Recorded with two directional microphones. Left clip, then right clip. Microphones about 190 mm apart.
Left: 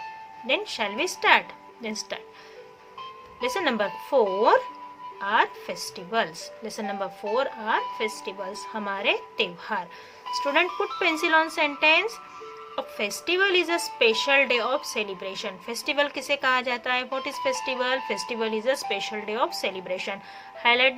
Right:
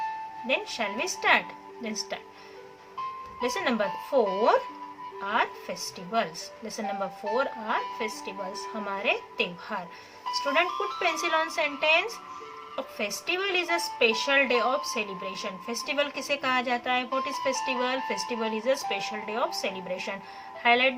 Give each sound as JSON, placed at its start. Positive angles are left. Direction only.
{"t": 0.4, "sound": "a woman's voice", "side_deg": 55}
{"t": 3.4, "sound": "a woman's voice", "side_deg": 55}
{"t": 5.2, "sound": "a woman's voice", "side_deg": 55}